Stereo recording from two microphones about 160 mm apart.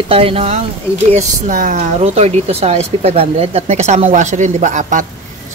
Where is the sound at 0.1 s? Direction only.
35° right (ahead or behind).